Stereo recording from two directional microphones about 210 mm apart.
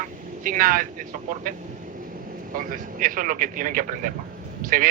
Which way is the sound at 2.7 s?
40° right (ahead or behind).